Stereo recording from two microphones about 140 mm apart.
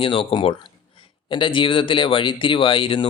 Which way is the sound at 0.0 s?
40° left (ahead or behind).